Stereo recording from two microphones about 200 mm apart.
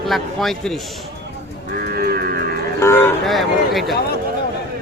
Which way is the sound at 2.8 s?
10° left (ahead or behind).